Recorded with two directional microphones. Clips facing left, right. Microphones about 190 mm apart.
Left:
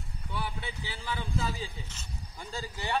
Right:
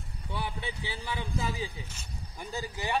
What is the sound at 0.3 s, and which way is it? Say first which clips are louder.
A man's voice: right 1 dB; 20° right (ahead or behind).